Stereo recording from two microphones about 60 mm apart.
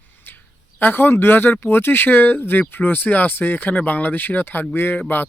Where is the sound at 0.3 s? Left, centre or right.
Left.